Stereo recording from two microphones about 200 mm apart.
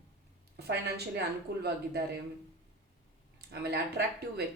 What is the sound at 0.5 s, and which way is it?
A woman's voice, 55° right (ahead or behind).